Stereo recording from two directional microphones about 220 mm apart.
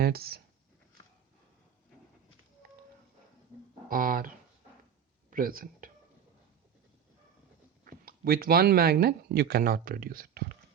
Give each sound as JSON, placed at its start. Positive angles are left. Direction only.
{"t": 0.0, "sound": "speech", "side_deg": -45}
{"t": 3.8, "sound": "speech", "side_deg": -40}
{"t": 7.9, "sound": "speech", "side_deg": -40}